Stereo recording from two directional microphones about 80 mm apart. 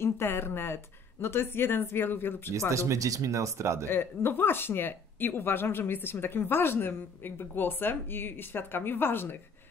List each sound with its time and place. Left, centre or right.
0.0 s speech: left
2.7 s speech: right
3.9 s speech: left